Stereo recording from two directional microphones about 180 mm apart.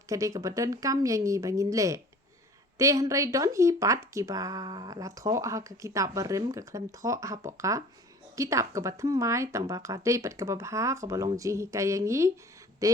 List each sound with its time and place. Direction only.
0.1 s speech: 20° right (ahead or behind)